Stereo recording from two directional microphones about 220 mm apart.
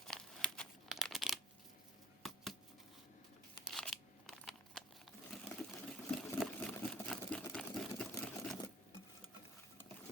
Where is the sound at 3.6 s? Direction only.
Centre (ahead or behind).